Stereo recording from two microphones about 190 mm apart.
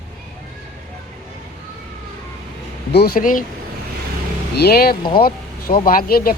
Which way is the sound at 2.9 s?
55° left (ahead or behind).